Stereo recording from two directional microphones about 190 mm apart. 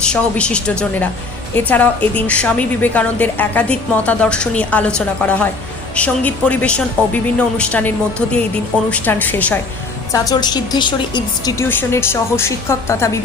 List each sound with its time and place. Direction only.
0.0 s a woman's voice: 5° left (ahead or behind)
10.1 s a woman's voice: 20° left (ahead or behind)